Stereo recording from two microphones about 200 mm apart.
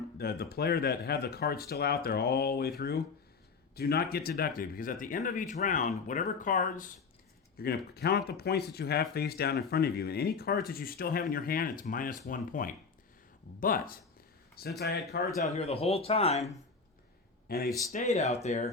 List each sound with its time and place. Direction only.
0.2 s speech: 50° left (ahead or behind)
7.5 s speech: 50° left (ahead or behind)
15.5 s speech: 30° left (ahead or behind)
17.5 s speech: 50° left (ahead or behind)
17.9 s speech: 35° left (ahead or behind)